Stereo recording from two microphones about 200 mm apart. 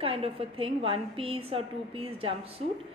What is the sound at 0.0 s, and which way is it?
Speech, 30° right (ahead or behind).